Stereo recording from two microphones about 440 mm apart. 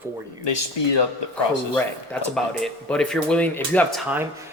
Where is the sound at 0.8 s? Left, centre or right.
Left.